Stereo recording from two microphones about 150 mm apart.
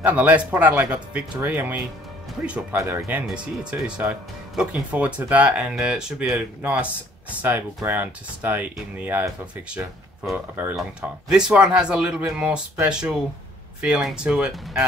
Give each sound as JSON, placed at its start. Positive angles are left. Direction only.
{"t": 0.0, "sound": "speech", "side_deg": -10}
{"t": 3.3, "sound": "speech", "side_deg": -5}